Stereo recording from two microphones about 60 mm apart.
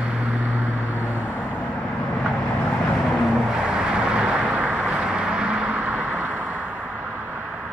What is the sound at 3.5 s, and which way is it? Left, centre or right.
Vehicle, centre.